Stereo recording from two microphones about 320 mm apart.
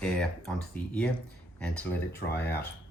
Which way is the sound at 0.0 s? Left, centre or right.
Centre.